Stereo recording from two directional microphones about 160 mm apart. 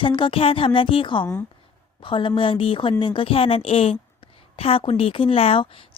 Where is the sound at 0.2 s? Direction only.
35° left (ahead or behind).